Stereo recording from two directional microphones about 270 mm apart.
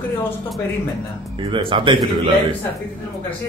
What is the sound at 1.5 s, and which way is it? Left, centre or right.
Speech, centre.